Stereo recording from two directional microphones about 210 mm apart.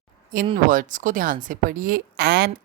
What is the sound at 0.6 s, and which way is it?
Speech, 40° right (ahead or behind).